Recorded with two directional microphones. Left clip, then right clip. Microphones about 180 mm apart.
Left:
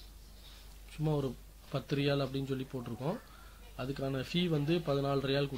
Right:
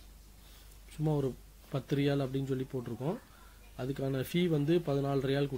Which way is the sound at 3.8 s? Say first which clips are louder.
Right 2 dB; 25° right (ahead or behind).